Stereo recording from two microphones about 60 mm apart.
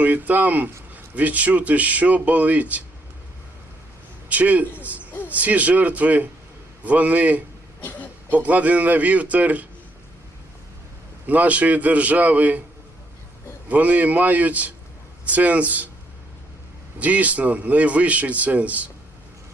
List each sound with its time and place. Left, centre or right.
0.0 s a man's voice: right
4.3 s a man's voice: right
4.8 s hoot: right
5.3 s a man's voice: right
11.3 s a man's voice: right
13.7 s a man's voice: right
17.0 s a man's voice: right